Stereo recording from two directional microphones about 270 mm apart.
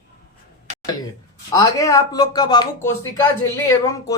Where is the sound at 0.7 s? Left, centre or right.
Right.